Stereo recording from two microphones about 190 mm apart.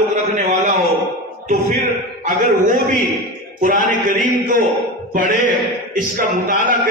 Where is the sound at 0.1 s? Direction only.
40° right (ahead or behind).